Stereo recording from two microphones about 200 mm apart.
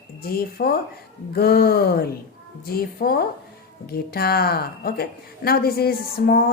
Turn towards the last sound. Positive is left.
turn(degrees=45)  # may be behind; listen again after turning